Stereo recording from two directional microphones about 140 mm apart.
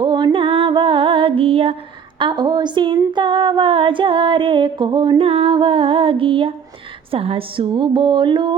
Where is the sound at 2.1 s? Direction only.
35° right (ahead or behind).